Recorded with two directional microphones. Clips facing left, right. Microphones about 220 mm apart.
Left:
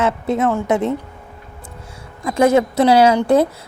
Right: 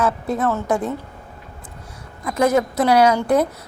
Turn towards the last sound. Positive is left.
turn(degrees=25)  # may be behind; listen again after turning